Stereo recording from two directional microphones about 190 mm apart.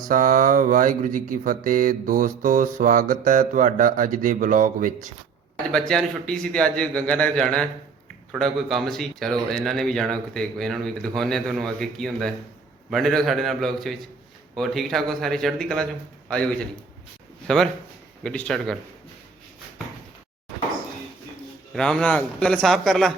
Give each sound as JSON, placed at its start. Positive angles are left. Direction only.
{"t": 0.1, "sound": "speech", "side_deg": -45}
{"t": 5.9, "sound": "speech", "side_deg": 5}
{"t": 21.8, "sound": "speech", "side_deg": 5}